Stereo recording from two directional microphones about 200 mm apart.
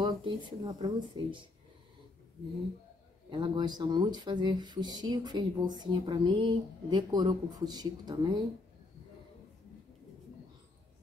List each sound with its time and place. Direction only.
0.0 s speech: 20° right (ahead or behind)
3.3 s speech: 25° right (ahead or behind)